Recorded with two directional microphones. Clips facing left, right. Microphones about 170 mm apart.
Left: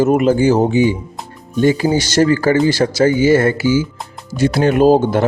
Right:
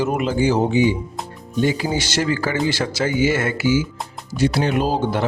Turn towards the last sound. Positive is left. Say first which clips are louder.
# left 9 dB
turn(degrees=45)  # may be behind; listen again after turning